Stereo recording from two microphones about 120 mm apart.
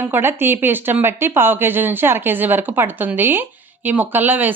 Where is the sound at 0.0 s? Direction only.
15° right (ahead or behind).